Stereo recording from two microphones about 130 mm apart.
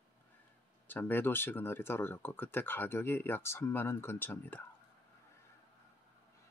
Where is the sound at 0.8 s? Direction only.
15° left (ahead or behind).